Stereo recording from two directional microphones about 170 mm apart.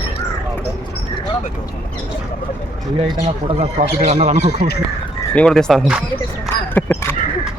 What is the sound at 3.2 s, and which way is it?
Speech, 40° right (ahead or behind).